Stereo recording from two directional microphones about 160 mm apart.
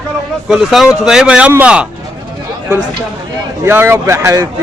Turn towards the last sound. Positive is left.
turn(degrees=-20)  # may be behind; listen again after turning